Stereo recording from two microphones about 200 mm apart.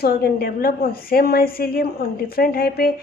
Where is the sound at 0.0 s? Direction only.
50° left (ahead or behind).